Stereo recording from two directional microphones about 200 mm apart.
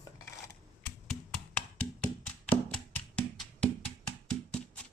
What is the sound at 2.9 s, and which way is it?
Music, 5° left (ahead or behind).